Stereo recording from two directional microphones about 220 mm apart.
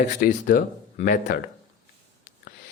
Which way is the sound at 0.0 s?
35° left (ahead or behind).